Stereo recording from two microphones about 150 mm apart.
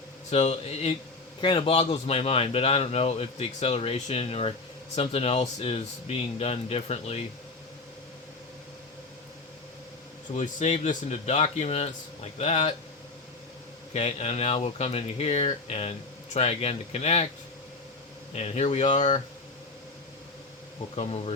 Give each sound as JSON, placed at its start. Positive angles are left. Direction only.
{"t": 0.3, "sound": "a man's voice", "side_deg": 45}
{"t": 10.3, "sound": "speech", "side_deg": 55}
{"t": 13.9, "sound": "speech", "side_deg": 45}
{"t": 18.3, "sound": "speech", "side_deg": 45}
{"t": 20.9, "sound": "speech", "side_deg": 45}